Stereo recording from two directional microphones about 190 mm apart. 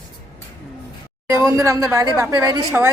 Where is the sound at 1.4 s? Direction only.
15° right (ahead or behind).